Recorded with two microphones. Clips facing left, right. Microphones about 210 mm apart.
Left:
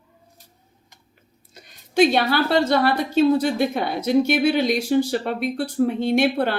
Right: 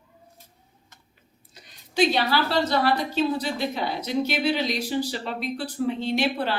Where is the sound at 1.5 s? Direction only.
55° left (ahead or behind).